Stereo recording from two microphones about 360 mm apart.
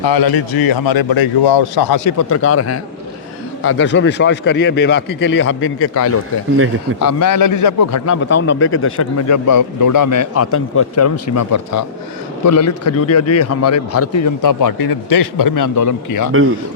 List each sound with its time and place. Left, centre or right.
0.0 s a man's voice: left
2.0 s a man's voice: left